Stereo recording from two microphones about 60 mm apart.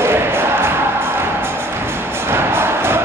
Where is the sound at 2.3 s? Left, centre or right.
Right.